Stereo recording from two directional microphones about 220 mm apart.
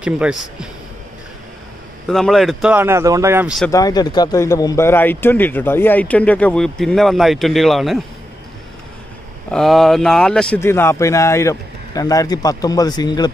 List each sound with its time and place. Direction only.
0.0 s speech: 5° right (ahead or behind)
2.0 s speech: centre (ahead or behind)
3.7 s a man's voice: 15° left (ahead or behind); by 8.0 s centre (ahead or behind)
9.5 s a man's voice: centre (ahead or behind); by 13.3 s 20° left (ahead or behind)